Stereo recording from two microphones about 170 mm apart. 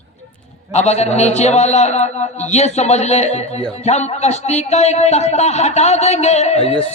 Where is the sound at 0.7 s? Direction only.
40° left (ahead or behind).